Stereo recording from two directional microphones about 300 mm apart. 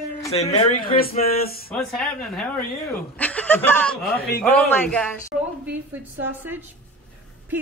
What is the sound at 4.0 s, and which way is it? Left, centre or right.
Speech, left.